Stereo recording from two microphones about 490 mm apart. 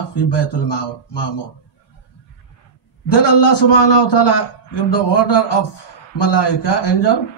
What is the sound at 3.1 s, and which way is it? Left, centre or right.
A man's voice, left.